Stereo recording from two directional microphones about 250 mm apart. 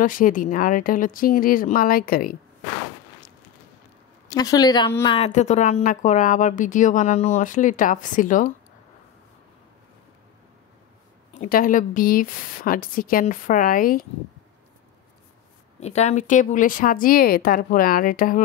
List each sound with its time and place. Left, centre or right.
0.0 s a woman's voice: left
4.3 s a woman's voice: centre; by 8.5 s left
11.3 s a woman's voice: left
15.8 s a woman's voice: left